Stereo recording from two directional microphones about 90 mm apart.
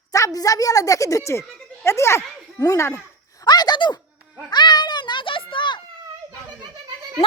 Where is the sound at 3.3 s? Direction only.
50° left (ahead or behind).